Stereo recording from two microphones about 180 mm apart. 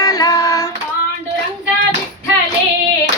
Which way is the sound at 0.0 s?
20° left (ahead or behind).